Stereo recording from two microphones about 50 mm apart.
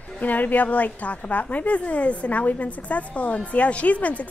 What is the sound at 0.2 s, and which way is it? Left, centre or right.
A woman's voice, left.